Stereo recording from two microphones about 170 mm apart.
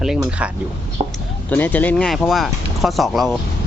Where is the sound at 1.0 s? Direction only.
35° right (ahead or behind).